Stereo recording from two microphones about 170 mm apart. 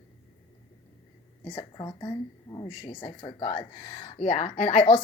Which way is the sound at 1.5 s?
25° left (ahead or behind).